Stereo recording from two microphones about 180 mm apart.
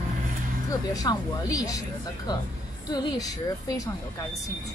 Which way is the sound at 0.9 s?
20° left (ahead or behind).